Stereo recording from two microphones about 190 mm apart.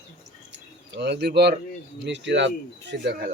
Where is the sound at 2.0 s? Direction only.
65° right (ahead or behind).